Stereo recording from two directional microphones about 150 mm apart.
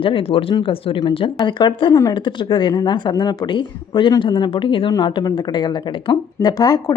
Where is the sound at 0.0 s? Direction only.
40° left (ahead or behind).